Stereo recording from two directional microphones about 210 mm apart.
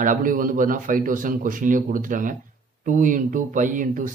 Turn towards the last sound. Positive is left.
turn(degrees=-40)  # may be behind; listen again after turning